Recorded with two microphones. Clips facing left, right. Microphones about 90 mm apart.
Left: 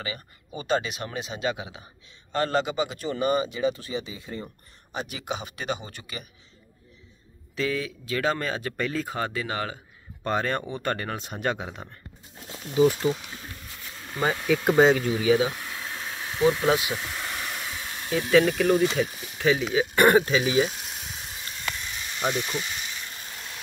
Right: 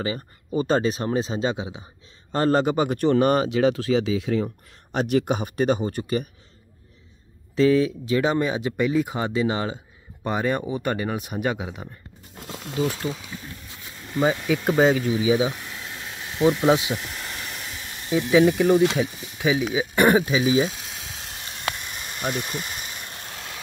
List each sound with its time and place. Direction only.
0.0 s speech: 35° right (ahead or behind)
2.3 s speech: 40° right (ahead or behind); by 4.5 s 90° right
4.9 s speech: 65° right (ahead or behind)
5.2 s speech: 45° right (ahead or behind)
7.5 s speech: 30° right (ahead or behind)
10.2 s speech: 10° right (ahead or behind)
12.4 s a sound: 90° right
14.2 s speech: centre (ahead or behind)
15.2 s speech: 15° right (ahead or behind)
18.1 s speech: 15° right (ahead or behind)
21.1 s a sound: 80° right; by 22.2 s 50° right (ahead or behind)
22.6 s vehicle: 45° right (ahead or behind); by 23.6 s 75° right (ahead or behind)